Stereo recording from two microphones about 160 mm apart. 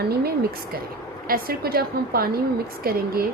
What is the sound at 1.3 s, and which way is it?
A woman's voice, 70° right (ahead or behind).